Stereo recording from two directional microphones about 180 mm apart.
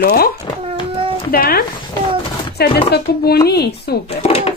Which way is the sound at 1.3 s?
55° left (ahead or behind).